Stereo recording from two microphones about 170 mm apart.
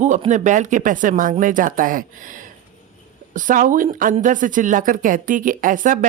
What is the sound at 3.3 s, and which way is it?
Speech, 50° right (ahead or behind).